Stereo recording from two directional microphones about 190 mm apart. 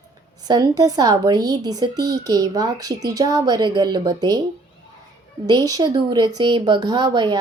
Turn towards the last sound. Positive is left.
turn(degrees=-20)  # may be behind; listen again after turning